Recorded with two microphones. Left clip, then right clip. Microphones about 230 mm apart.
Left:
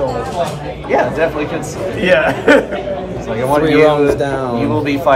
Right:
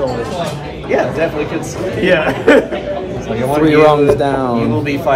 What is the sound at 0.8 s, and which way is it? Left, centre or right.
Speech, left.